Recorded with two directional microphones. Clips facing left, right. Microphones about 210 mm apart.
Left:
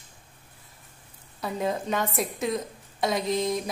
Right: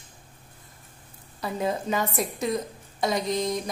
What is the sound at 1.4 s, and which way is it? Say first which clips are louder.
A woman's voice: right 1 dB; centre (ahead or behind).